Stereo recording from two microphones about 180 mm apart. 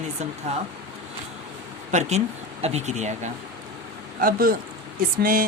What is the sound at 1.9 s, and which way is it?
Speech, 40° right (ahead or behind).